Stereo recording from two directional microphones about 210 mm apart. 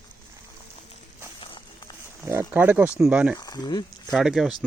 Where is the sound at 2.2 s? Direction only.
10° right (ahead or behind).